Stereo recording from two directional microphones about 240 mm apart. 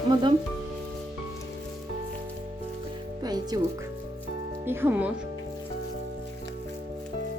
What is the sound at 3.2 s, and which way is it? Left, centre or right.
Speech, centre.